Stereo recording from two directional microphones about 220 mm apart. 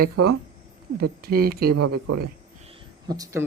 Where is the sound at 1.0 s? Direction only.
45° right (ahead or behind).